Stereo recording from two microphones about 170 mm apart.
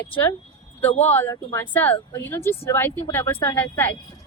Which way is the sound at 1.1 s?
10° left (ahead or behind).